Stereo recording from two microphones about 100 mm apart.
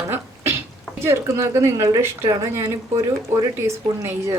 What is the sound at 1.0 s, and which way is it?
Speech, 30° right (ahead or behind).